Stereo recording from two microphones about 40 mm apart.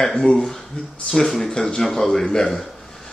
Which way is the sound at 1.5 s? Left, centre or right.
Centre.